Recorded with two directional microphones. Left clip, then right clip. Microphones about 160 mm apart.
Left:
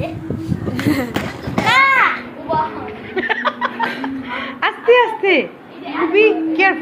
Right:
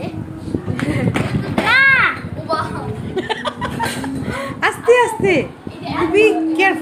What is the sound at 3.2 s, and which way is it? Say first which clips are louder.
Chuckle: left 4 dB; 25° right (ahead or behind).